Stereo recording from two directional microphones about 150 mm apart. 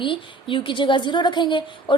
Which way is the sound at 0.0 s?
35° left (ahead or behind).